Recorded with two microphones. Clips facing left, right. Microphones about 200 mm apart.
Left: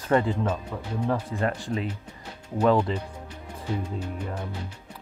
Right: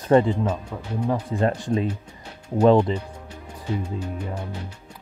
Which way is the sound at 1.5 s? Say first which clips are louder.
Right 6 dB; 15° right (ahead or behind).